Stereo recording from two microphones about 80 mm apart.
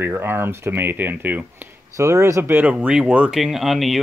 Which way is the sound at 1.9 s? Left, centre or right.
Right.